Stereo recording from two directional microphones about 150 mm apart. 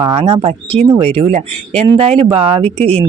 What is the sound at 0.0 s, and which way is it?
Speech, 40° right (ahead or behind).